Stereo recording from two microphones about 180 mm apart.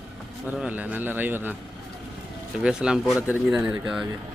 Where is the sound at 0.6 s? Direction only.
10° right (ahead or behind).